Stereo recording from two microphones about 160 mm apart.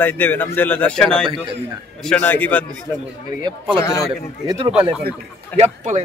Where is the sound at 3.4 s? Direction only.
35° right (ahead or behind).